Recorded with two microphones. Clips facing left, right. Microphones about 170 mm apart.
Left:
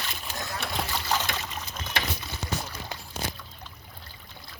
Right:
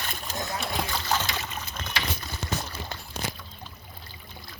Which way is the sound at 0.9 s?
Centre (ahead or behind).